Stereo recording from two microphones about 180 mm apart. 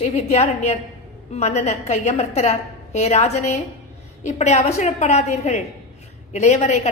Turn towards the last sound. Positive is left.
turn(degrees=40)  # may be behind; listen again after turning